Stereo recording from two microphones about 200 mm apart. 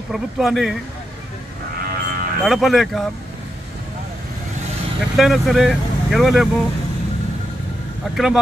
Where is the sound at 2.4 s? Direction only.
Centre (ahead or behind).